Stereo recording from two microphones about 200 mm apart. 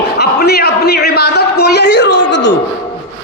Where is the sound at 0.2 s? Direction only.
55° left (ahead or behind).